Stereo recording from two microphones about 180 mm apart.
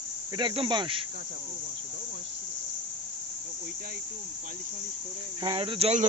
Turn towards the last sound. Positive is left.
turn(degrees=-35)  # may be behind; listen again after turning